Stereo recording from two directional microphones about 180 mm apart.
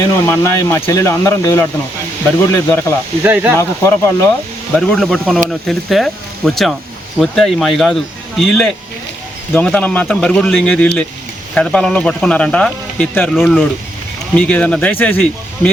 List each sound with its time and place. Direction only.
0.0 s speech: 15° left (ahead or behind)
3.2 s speech: 10° right (ahead or behind)
3.6 s speech: 15° left (ahead or behind)
4.8 s speech: 5° left (ahead or behind)